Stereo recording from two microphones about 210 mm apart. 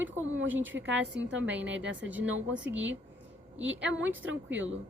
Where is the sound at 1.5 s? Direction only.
5° right (ahead or behind).